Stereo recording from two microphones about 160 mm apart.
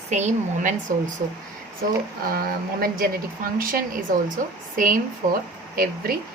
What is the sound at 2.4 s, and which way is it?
A woman's voice, 65° right (ahead or behind).